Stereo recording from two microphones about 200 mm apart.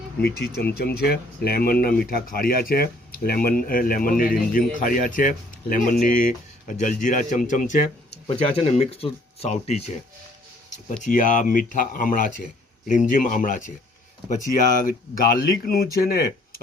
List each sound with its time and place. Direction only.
0.2 s speech: 55° left (ahead or behind); by 10.0 s 30° left (ahead or behind)
11.0 s speech: 40° left (ahead or behind)